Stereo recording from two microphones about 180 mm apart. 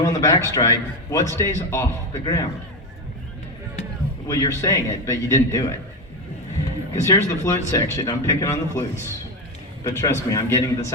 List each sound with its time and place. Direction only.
0.0 s a man's voice: 15° left (ahead or behind)
4.3 s a man's voice: 20° left (ahead or behind)
6.9 s a man's voice: 15° left (ahead or behind)